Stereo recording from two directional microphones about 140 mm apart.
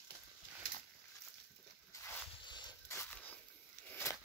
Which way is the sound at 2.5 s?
30° left (ahead or behind).